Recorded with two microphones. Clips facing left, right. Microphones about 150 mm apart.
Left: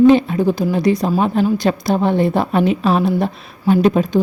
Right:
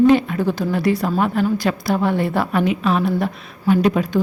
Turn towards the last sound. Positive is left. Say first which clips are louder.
# left 3 dB
turn(degrees=25)  # may be behind; listen again after turning